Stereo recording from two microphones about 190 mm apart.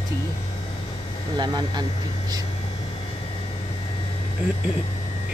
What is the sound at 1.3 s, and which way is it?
Speech, 20° right (ahead or behind).